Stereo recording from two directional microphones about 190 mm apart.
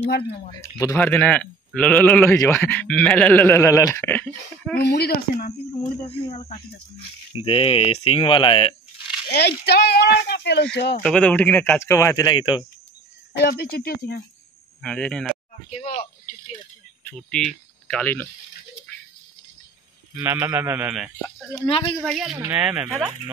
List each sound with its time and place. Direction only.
0.5 s speech: 15° left (ahead or behind)
4.7 s speech: 60° left (ahead or behind)
6.0 s speech: 30° left (ahead or behind)
9.3 s speech: 60° left (ahead or behind)
11.0 s speech: 5° left (ahead or behind); by 12.6 s 25° left (ahead or behind)
13.4 s speech: 55° left (ahead or behind)
14.8 s speech: 5° left (ahead or behind)
17.1 s speech: 5° left (ahead or behind)
20.2 s speech: 10° right (ahead or behind)
21.6 s speech: 30° left (ahead or behind)
22.0 s speech: centre (ahead or behind)